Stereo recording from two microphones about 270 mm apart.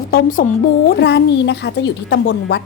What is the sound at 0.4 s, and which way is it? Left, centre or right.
Speech, left.